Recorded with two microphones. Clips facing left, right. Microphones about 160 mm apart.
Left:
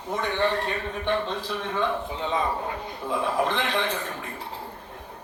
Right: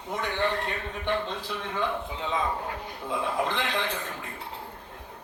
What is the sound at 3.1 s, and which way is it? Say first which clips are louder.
A man's voice: left 3 dB; 60° left (ahead or behind).